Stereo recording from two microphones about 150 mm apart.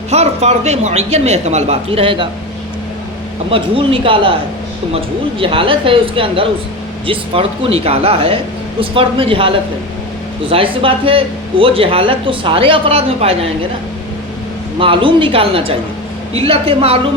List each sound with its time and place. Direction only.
0.1 s speech: 45° right (ahead or behind)
3.5 s speech: 35° right (ahead or behind)
10.5 s speech: 35° right (ahead or behind)
14.8 s speech: 35° right (ahead or behind)